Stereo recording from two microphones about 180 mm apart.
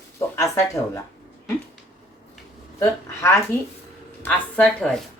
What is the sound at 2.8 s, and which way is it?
Speech, 15° left (ahead or behind).